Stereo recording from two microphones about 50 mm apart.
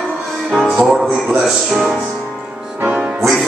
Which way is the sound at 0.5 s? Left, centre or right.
Centre.